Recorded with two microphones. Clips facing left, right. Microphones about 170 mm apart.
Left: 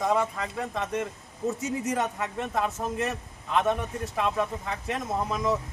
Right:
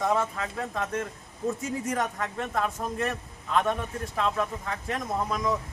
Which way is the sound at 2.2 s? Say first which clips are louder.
Left 1 dB; 20° left (ahead or behind).